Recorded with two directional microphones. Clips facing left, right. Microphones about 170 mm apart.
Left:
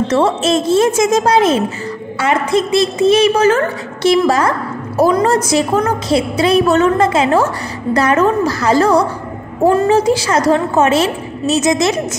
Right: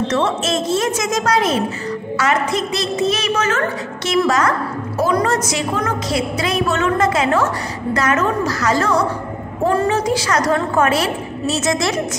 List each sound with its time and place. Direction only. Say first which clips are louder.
0.1 s a woman's voice: left 5 dB; 30° left (ahead or behind)